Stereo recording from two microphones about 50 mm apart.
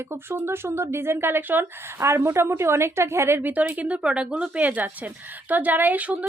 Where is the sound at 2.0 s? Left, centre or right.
Right.